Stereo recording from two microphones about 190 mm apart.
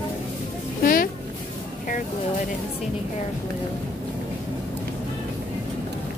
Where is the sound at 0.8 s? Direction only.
50° left (ahead or behind).